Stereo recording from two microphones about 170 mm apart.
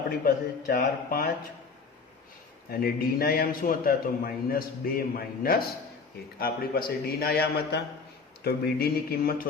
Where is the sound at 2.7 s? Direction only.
60° left (ahead or behind).